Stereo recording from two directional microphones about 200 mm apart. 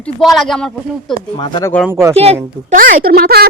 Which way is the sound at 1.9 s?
15° right (ahead or behind).